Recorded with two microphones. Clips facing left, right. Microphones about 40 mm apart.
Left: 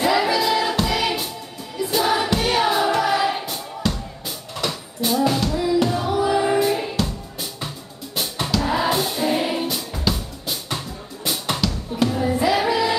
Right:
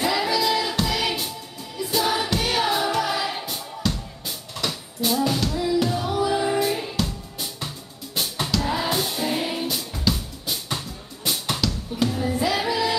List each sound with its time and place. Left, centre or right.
0.0 s music: centre
1.8 s choir: centre
4.6 s a sound: centre
5.8 s music: centre
6.8 s music: centre